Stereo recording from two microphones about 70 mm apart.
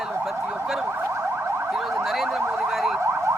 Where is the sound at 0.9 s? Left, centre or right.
Right.